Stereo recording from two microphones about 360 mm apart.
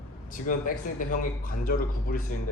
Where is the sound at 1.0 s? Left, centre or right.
Left.